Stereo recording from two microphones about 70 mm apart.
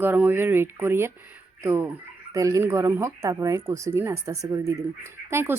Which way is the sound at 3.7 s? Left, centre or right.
Right.